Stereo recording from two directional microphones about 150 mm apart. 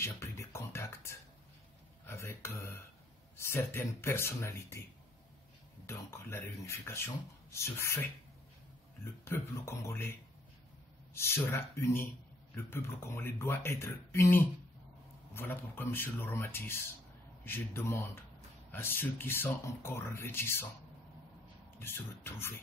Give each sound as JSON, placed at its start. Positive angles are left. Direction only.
{"t": 0.0, "sound": "music", "side_deg": 15}
{"t": 2.0, "sound": "speech", "side_deg": 15}
{"t": 5.9, "sound": "speech", "side_deg": 15}
{"t": 9.0, "sound": "speech", "side_deg": 15}
{"t": 11.1, "sound": "speech", "side_deg": 15}
{"t": 21.7, "sound": "speech", "side_deg": 15}